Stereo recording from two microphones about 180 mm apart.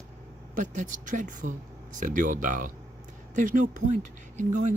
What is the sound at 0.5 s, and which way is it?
Speech, 45° right (ahead or behind).